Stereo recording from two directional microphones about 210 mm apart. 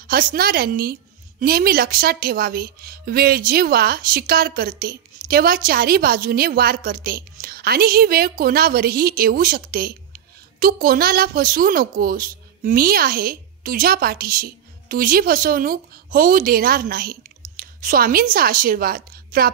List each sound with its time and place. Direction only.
0.0 s a woman's voice: 45° right (ahead or behind)